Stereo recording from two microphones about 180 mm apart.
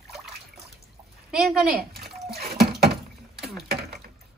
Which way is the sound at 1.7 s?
60° right (ahead or behind).